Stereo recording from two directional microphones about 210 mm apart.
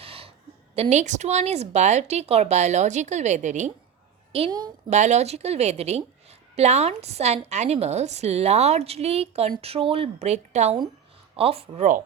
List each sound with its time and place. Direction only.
0.0 s a sound: 25° right (ahead or behind)
0.8 s a woman's voice: 35° right (ahead or behind)
4.9 s speech: 35° right (ahead or behind)